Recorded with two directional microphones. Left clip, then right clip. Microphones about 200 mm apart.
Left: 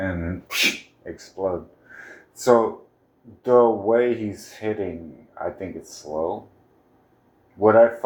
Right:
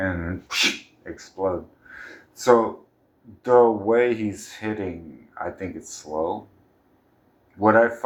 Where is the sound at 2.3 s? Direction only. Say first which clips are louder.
Even; 10° right (ahead or behind).